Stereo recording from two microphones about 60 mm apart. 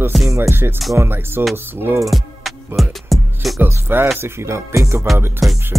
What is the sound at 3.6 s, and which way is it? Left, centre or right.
Speech, right.